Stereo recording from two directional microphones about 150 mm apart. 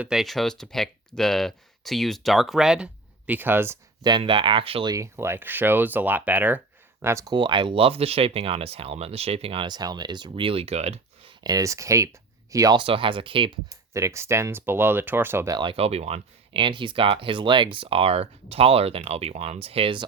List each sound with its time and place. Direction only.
0.0 s speech: centre (ahead or behind)
4.0 s speech: 30° right (ahead or behind)
4.9 s speech: 20° right (ahead or behind)
7.3 s speech: 30° right (ahead or behind)
11.3 s speech: 25° right (ahead or behind)
12.8 s speech: 35° right (ahead or behind)
13.9 s speech: 20° right (ahead or behind)
15.5 s speech: 35° right (ahead or behind)